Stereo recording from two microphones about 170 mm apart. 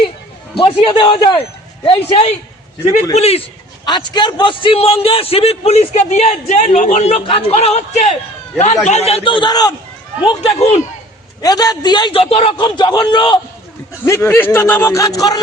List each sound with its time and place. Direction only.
0.5 s a man's voice: 30° left (ahead or behind)
3.8 s a man's voice: 25° left (ahead or behind)
10.2 s a man's voice: 35° left (ahead or behind)
11.4 s a man's voice: 25° left (ahead or behind)
14.0 s speech: 15° left (ahead or behind)